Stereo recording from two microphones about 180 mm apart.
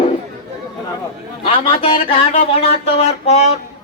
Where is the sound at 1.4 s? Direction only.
30° left (ahead or behind).